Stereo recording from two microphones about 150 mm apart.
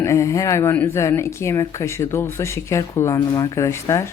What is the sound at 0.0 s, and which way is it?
Speech, 20° left (ahead or behind).